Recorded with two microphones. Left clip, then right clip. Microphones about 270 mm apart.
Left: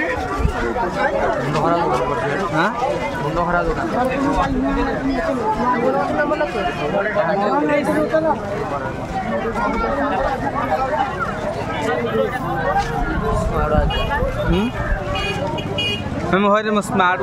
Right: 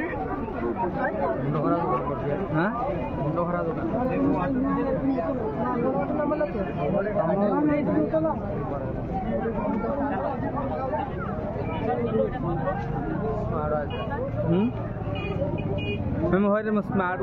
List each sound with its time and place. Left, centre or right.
16.3 s speech: centre